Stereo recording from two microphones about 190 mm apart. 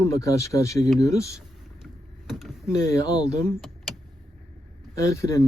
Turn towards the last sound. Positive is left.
turn(degrees=15)  # may be behind; listen again after turning